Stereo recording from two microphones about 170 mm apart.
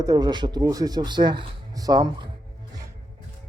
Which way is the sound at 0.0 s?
25° right (ahead or behind).